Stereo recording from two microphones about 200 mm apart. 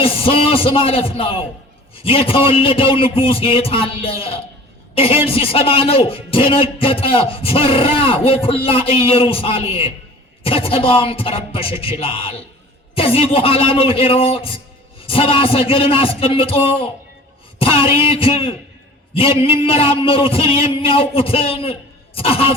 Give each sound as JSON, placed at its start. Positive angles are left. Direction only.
{"t": 0.0, "sound": "a man's voice", "side_deg": 30}